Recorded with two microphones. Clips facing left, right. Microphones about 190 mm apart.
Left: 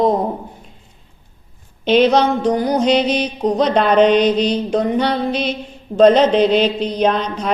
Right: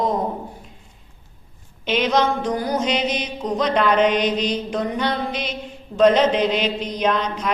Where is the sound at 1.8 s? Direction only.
35° left (ahead or behind).